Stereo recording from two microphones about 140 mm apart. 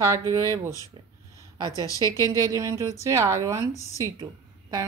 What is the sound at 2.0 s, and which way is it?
Speech, 25° left (ahead or behind).